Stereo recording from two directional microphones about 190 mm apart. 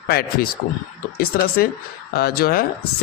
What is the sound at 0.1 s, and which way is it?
Speech, 50° left (ahead or behind).